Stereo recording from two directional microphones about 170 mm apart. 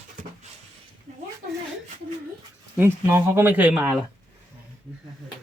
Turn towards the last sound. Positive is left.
turn(degrees=-5)  # may be behind; listen again after turning